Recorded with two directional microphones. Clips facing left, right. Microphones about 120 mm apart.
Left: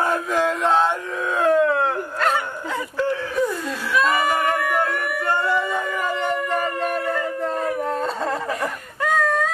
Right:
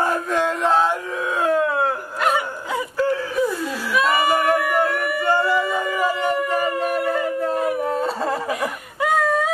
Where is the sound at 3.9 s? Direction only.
5° right (ahead or behind).